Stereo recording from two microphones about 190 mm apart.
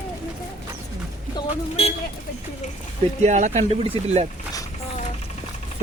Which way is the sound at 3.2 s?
40° right (ahead or behind).